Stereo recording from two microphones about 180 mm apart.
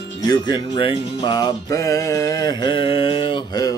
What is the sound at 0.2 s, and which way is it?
Music, 25° left (ahead or behind).